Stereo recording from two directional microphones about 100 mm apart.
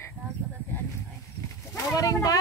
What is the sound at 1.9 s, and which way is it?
Speech, 35° left (ahead or behind).